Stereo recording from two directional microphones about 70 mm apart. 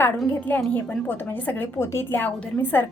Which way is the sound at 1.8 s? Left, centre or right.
Left.